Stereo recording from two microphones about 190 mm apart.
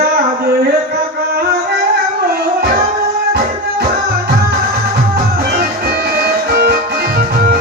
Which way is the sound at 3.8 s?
55° right (ahead or behind).